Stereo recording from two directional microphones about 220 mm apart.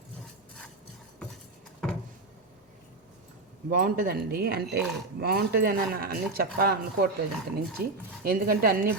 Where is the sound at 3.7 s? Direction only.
40° right (ahead or behind).